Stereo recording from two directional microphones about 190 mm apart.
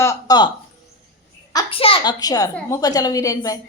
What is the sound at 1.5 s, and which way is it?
A child's voice, 30° left (ahead or behind).